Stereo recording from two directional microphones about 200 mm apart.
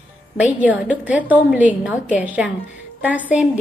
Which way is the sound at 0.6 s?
5° right (ahead or behind).